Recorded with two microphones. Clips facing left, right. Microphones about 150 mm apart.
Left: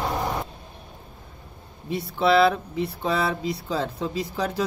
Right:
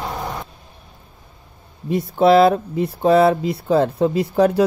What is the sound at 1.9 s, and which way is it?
Speech, 50° right (ahead or behind).